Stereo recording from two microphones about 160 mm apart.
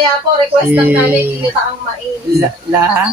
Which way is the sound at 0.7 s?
10° right (ahead or behind).